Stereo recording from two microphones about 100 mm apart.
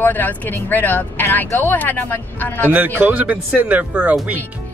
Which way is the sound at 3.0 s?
15° right (ahead or behind).